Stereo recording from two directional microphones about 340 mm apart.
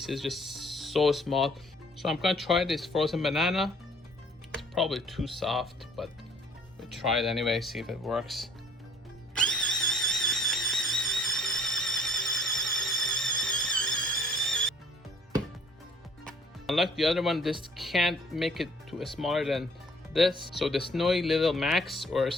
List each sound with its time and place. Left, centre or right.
0.0 s speech: centre
9.3 s music: centre
16.2 s speech: centre